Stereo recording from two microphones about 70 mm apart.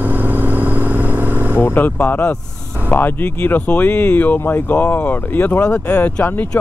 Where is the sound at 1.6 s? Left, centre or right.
Left.